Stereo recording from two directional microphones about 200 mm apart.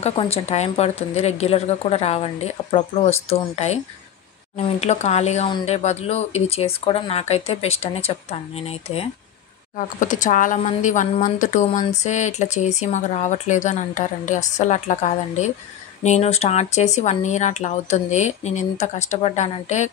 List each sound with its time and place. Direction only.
0.0 s speech: 30° left (ahead or behind)
9.8 s speech: 40° left (ahead or behind)